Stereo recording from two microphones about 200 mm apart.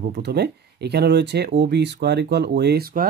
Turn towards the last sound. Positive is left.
turn(degrees=-50)  # may be behind; listen again after turning